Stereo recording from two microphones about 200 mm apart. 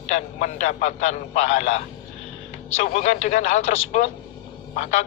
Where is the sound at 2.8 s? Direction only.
35° left (ahead or behind).